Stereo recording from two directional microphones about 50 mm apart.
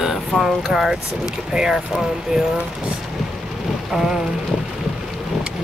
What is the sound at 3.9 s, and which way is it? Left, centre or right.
Vehicle, centre.